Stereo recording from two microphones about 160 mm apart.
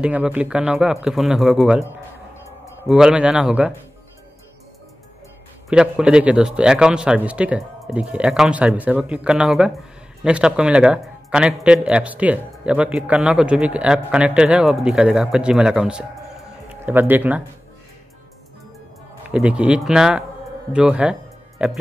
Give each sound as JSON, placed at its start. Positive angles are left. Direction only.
{"t": 0.0, "sound": "a man's voice", "side_deg": -10}
{"t": 2.9, "sound": "a man's voice", "side_deg": -5}
{"t": 5.7, "sound": "a man's voice", "side_deg": -5}
{"t": 19.3, "sound": "a man's voice", "side_deg": -5}